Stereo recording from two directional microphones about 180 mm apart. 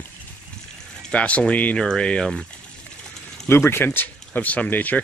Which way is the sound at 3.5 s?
15° left (ahead or behind).